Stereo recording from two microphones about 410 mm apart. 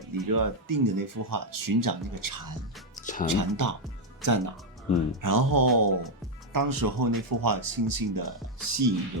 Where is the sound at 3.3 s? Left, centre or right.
Right.